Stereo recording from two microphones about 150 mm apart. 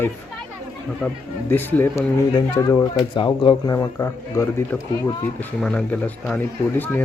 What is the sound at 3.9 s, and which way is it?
Speech, 15° left (ahead or behind).